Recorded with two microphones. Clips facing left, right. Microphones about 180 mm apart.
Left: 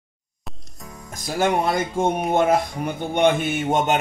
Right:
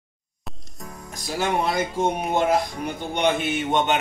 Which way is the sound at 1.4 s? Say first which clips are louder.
Left 3 dB; 50° left (ahead or behind).